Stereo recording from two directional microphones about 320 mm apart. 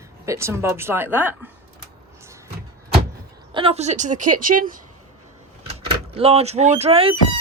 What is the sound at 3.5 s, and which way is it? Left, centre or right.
Speech, centre.